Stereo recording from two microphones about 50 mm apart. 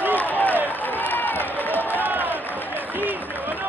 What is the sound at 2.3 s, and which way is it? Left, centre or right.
Crowd, left.